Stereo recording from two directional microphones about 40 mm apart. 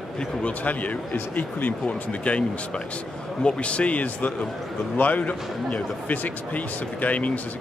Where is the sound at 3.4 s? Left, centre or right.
Left.